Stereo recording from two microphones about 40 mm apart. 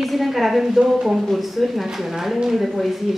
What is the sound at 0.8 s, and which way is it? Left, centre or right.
Speech, centre.